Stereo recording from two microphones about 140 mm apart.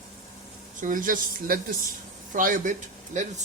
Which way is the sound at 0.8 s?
75° right (ahead or behind).